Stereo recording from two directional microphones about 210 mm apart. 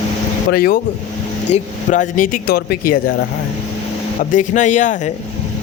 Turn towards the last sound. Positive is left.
turn(degrees=35)  # may be behind; listen again after turning